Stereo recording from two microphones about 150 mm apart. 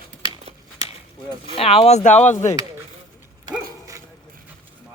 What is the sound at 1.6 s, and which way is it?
Speech, 40° left (ahead or behind).